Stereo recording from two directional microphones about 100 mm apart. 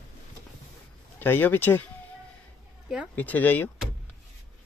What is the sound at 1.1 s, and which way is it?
Speech, 20° left (ahead or behind).